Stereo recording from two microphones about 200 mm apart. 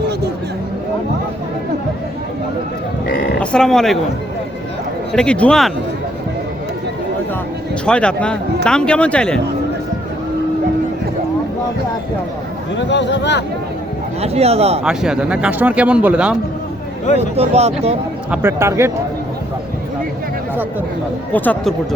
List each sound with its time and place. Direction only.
3.4 s speech: 5° left (ahead or behind)
5.1 s a man's voice: 5° left (ahead or behind)
7.9 s a man's voice: 5° left (ahead or behind)
12.7 s speech: 60° left (ahead or behind)
14.2 s speech: 30° right (ahead or behind)
14.8 s a man's voice: 5° right (ahead or behind)
17.2 s speech: 30° right (ahead or behind)
18.3 s speech: 10° right (ahead or behind)
21.3 s speech: 5° left (ahead or behind)